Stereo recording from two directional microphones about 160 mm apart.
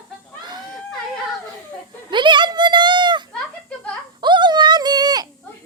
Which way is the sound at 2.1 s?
30° right (ahead or behind).